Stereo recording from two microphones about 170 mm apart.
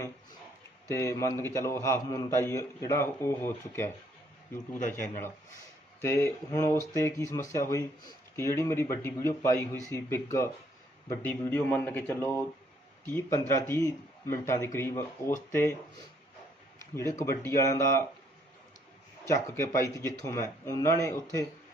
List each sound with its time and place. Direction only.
0.9 s a man's voice: 15° left (ahead or behind)
4.9 s a man's voice: 10° left (ahead or behind)
11.1 s a man's voice: 10° left (ahead or behind)
16.9 s a man's voice: 15° left (ahead or behind)
19.2 s a man's voice: 15° left (ahead or behind)